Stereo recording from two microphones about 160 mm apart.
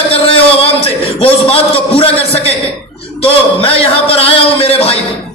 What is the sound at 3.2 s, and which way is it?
A man's voice, 35° left (ahead or behind).